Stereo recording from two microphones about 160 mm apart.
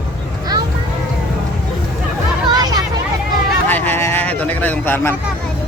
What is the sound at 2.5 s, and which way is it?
Chatter, 25° right (ahead or behind).